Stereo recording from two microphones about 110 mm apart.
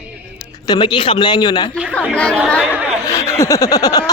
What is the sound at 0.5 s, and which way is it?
Snicker, 35° left (ahead or behind).